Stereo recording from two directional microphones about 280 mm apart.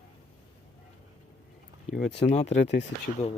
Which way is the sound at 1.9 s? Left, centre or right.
Left.